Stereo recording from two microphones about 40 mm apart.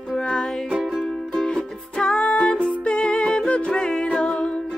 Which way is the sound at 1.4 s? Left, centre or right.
Centre.